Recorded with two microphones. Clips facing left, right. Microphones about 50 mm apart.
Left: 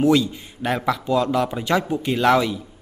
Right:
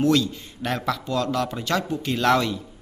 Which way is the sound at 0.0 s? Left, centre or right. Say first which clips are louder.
Left 3 dB; centre.